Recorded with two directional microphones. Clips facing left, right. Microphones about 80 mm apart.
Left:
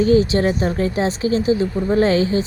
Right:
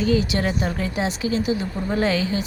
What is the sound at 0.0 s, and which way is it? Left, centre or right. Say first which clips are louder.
Speech: left 6 dB; left.